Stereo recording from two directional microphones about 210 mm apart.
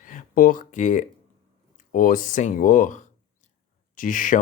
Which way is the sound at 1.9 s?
40° left (ahead or behind).